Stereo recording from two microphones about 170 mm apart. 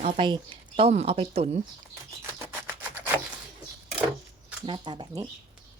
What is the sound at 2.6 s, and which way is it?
Rub, 10° right (ahead or behind).